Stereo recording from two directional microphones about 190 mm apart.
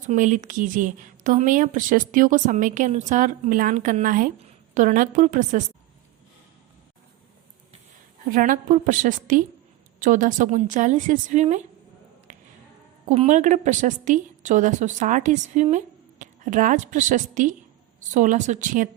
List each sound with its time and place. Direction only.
0.1 s a woman's voice: 40° right (ahead or behind)
8.3 s a woman's voice: 45° right (ahead or behind)
12.3 s a sound: 40° right (ahead or behind)
13.1 s a woman's voice: 40° right (ahead or behind)